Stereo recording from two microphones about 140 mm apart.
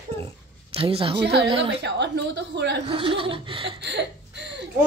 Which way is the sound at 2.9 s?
40° right (ahead or behind).